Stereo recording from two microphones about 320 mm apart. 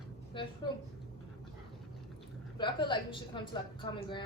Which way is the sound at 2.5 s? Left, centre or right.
Centre.